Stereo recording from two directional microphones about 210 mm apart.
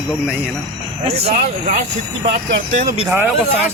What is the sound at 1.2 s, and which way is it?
Speech, 30° right (ahead or behind).